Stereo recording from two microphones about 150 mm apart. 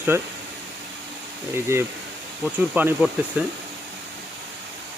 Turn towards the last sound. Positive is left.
turn(degrees=-10)  # may be behind; listen again after turning